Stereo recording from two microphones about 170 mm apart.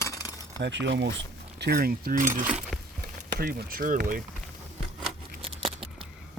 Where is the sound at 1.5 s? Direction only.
70° right (ahead or behind); by 2.4 s 50° right (ahead or behind).